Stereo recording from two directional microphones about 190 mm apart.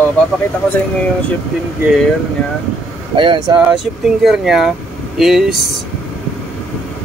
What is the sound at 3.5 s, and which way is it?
Speech, 5° right (ahead or behind).